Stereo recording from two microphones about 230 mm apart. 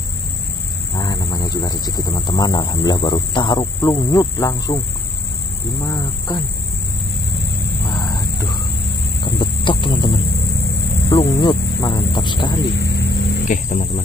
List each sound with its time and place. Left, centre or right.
0.9 s speech: centre
5.9 s speech: centre
7.9 s wild animals: centre
9.2 s a sound: left
11.3 s speech: left
12.7 s vehicle: left
13.7 s speech: left